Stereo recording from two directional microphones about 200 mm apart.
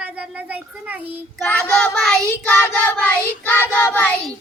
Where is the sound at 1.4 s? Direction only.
5° left (ahead or behind).